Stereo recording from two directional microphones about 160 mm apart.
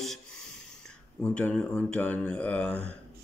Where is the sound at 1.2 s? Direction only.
5° left (ahead or behind).